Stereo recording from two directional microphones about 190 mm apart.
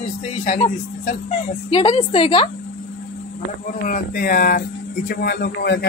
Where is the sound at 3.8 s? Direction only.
45° left (ahead or behind).